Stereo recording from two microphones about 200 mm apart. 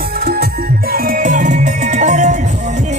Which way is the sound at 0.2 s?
50° right (ahead or behind).